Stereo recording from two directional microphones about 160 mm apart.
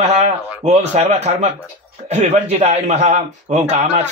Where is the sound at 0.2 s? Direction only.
45° right (ahead or behind).